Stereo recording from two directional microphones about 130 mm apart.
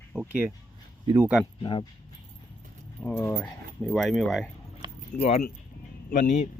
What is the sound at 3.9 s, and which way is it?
Speech, centre (ahead or behind).